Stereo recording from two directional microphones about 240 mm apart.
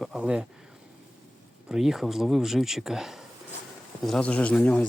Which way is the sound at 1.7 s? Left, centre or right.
Centre.